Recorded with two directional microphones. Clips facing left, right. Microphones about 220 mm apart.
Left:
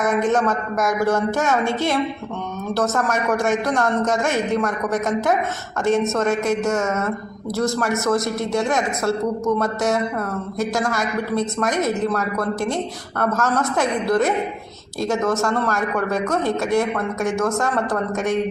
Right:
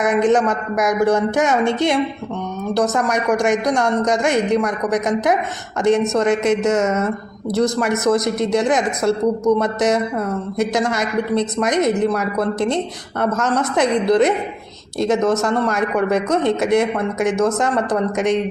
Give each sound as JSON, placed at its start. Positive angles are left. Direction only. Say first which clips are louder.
{"t": 0.0, "sound": "speech", "louder": "right 3 dB", "side_deg": -15}